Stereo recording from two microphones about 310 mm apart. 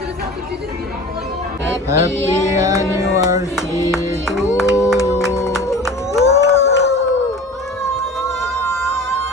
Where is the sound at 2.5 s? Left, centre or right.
Centre.